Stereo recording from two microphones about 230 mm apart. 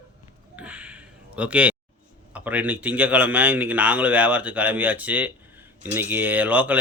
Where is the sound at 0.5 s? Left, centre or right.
Centre.